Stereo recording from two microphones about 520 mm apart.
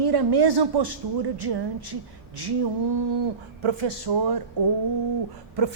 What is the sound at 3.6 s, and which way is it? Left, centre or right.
Speech, right.